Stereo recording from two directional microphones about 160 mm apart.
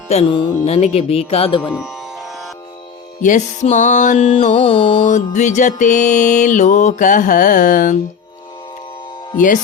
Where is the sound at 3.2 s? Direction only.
50° left (ahead or behind).